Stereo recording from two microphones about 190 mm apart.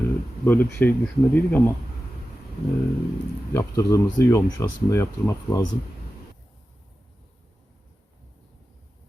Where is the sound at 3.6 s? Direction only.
15° left (ahead or behind).